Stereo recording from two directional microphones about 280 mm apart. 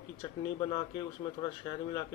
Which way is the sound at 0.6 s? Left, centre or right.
Centre.